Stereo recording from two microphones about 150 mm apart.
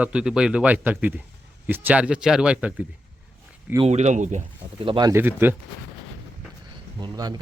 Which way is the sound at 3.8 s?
50° right (ahead or behind).